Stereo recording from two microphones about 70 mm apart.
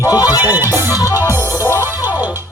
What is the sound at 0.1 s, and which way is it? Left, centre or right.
Music, left.